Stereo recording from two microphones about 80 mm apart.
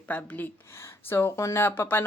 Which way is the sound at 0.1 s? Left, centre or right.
Centre.